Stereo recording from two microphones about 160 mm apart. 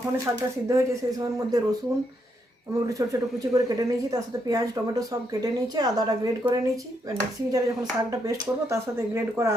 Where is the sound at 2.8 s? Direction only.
20° right (ahead or behind).